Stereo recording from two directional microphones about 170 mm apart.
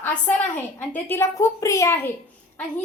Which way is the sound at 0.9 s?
15° left (ahead or behind).